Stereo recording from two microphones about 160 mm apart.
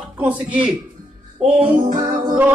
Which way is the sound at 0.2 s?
10° right (ahead or behind).